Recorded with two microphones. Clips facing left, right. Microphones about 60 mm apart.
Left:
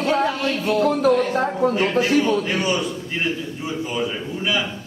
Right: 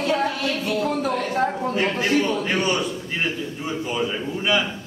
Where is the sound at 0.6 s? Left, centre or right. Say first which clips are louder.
Left 7 dB; left.